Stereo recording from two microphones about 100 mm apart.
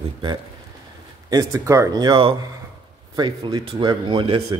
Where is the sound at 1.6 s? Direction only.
35° right (ahead or behind); by 4.4 s 60° right (ahead or behind).